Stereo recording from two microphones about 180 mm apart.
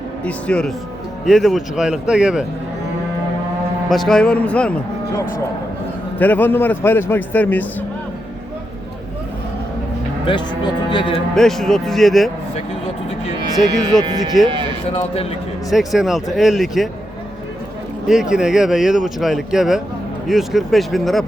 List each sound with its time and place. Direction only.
0.3 s speech: 5° left (ahead or behind)
3.8 s speech: centre (ahead or behind)
6.1 s a man's voice: 10° left (ahead or behind)
10.2 s speech: 25° left (ahead or behind)
11.3 s speech: centre (ahead or behind)
13.9 s speech: centre (ahead or behind)
14.4 s speech: 25° right (ahead or behind)
14.9 s a man's voice: 35° left (ahead or behind)
15.7 s speech: centre (ahead or behind)
18.1 s speech: 5° right (ahead or behind)